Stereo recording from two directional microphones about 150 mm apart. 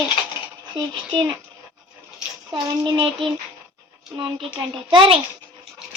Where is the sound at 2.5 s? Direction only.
35° right (ahead or behind).